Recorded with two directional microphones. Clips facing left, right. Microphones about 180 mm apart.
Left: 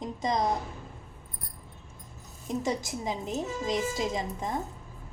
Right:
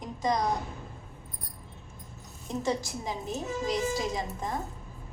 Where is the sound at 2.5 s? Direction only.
20° left (ahead or behind).